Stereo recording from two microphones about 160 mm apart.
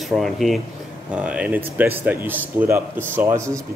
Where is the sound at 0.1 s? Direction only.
Centre (ahead or behind).